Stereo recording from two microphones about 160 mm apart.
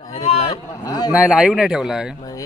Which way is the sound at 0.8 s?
25° left (ahead or behind).